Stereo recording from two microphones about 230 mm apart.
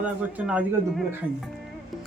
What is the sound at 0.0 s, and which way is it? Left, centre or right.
Speech, centre.